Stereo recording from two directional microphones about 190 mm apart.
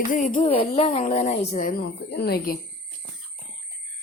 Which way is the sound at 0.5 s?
30° left (ahead or behind).